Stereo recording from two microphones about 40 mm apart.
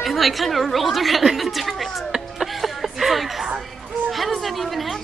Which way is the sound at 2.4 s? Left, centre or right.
Centre.